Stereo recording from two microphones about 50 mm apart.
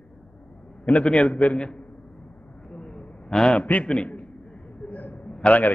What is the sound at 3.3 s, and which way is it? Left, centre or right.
Speech, centre.